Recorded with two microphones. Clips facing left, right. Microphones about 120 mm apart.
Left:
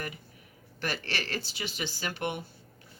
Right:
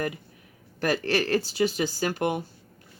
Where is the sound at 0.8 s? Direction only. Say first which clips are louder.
Right 10 dB; 40° right (ahead or behind).